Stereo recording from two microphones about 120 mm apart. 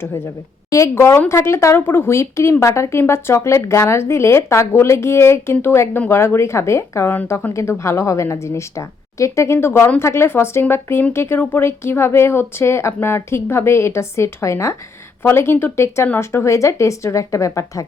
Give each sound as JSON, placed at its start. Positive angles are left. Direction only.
{"t": 0.7, "sound": "speech", "side_deg": 25}